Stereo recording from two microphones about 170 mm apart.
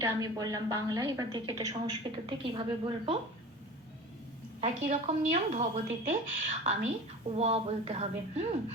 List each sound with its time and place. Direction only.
0.0 s a woman's voice: 20° right (ahead or behind)
4.6 s a woman's voice: 45° right (ahead or behind)